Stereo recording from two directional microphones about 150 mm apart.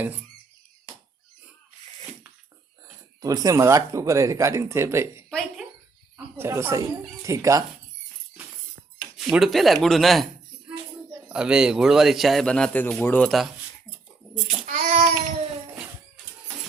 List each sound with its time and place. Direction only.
3.2 s speech: 25° right (ahead or behind)
5.3 s speech: 5° left (ahead or behind)
6.1 s speech: 15° right (ahead or behind)
9.1 s a man's voice: centre (ahead or behind)
11.3 s a man's voice: 5° right (ahead or behind)
14.7 s child singing: 55° right (ahead or behind)